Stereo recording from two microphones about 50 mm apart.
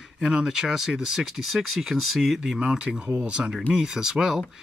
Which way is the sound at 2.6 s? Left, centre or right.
Centre.